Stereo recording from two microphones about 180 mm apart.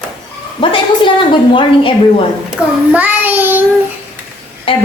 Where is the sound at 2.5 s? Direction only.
10° right (ahead or behind).